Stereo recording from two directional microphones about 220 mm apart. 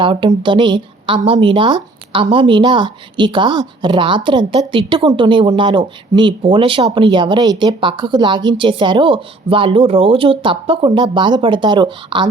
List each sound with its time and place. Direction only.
0.0 s speech: 20° right (ahead or behind)